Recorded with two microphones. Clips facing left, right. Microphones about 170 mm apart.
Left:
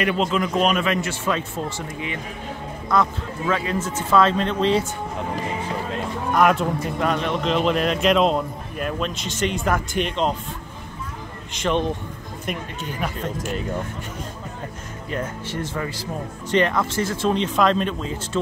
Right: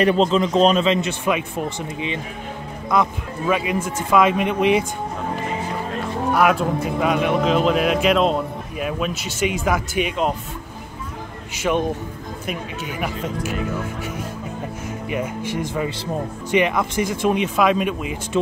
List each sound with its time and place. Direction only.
0.0 s a man's voice: 30° right (ahead or behind); by 4.8 s 15° right (ahead or behind)
6.3 s a man's voice: 5° right (ahead or behind)
11.5 s speech: 5° right (ahead or behind)
15.0 s speech: 10° right (ahead or behind)